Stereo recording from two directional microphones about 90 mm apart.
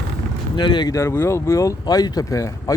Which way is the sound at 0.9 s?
30° left (ahead or behind).